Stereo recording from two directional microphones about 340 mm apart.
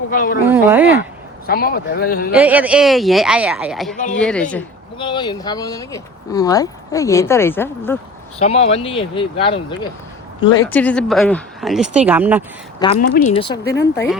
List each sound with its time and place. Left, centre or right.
0.1 s speech: left
0.4 s speech: centre
1.5 s speech: left
2.3 s speech: centre
3.9 s speech: left
4.2 s speech: centre
4.5 s speech: centre
8.4 s speech: centre
12.8 s speech: left
13.7 s speech: left